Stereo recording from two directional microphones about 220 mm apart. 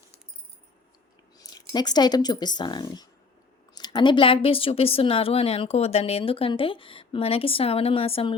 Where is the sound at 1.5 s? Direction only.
20° left (ahead or behind).